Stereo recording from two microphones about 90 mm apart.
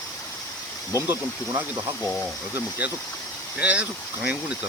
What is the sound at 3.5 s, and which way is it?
Speech, 15° right (ahead or behind).